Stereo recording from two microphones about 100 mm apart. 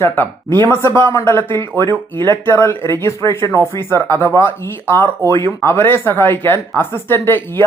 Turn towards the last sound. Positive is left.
turn(degrees=25)  # may be behind; listen again after turning